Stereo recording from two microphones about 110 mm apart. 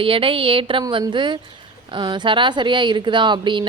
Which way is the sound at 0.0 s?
55° right (ahead or behind).